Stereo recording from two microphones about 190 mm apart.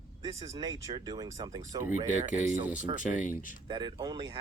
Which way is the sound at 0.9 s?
20° right (ahead or behind).